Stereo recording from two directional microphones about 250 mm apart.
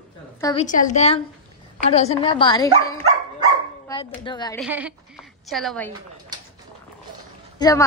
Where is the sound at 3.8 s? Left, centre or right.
Centre.